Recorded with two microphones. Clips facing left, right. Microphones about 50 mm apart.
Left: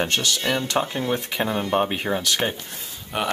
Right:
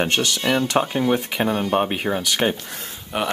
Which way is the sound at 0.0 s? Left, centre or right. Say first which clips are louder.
Right 2 dB; right.